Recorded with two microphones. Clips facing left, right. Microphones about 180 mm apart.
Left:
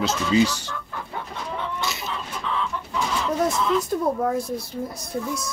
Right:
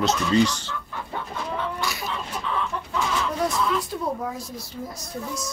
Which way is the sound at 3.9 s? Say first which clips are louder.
Left 6 dB; 50° left (ahead or behind).